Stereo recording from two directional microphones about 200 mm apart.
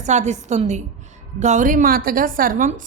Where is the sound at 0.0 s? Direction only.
35° right (ahead or behind).